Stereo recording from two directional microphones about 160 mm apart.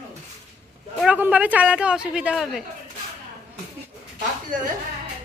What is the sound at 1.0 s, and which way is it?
Speech, 10° right (ahead or behind).